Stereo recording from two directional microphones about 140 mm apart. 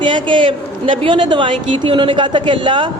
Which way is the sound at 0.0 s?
35° right (ahead or behind).